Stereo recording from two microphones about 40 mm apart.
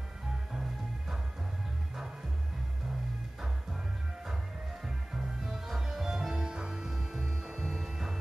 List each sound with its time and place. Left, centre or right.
4.8 s music: centre